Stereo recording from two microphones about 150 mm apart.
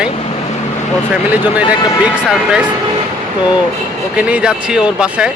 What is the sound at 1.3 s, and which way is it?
Speech, 10° right (ahead or behind).